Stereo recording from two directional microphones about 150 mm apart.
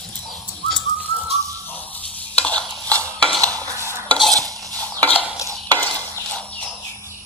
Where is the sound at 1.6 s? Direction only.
10° left (ahead or behind).